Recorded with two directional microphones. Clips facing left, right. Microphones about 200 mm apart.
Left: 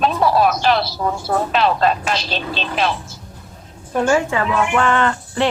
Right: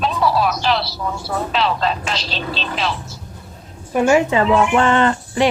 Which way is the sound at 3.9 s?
10° right (ahead or behind).